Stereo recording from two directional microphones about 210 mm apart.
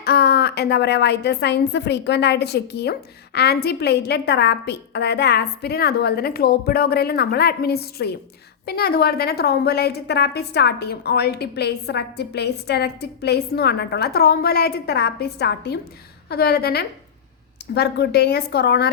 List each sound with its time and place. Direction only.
0.0 s a woman's voice: 50° left (ahead or behind)